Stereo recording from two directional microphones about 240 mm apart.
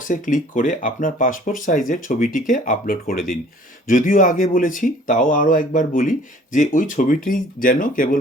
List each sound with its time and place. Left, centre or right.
0.1 s speech: left